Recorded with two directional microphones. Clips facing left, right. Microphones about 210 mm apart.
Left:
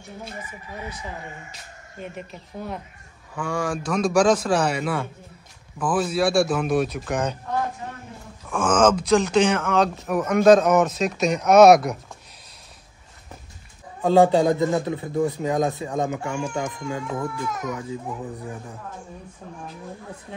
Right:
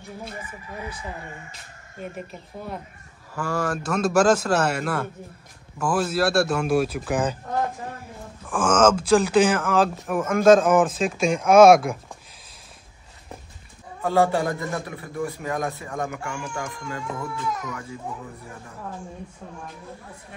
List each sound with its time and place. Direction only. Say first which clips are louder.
2.0 s speech: right 1 dB; centre (ahead or behind)
8.5 s speech: even; centre (ahead or behind)
14.0 s a man's voice: left 5 dB; 20° left (ahead or behind)